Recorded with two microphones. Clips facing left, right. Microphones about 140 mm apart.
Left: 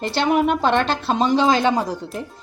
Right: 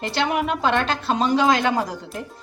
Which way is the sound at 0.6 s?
30° left (ahead or behind).